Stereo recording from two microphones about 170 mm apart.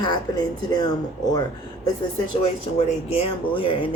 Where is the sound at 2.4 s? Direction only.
35° left (ahead or behind).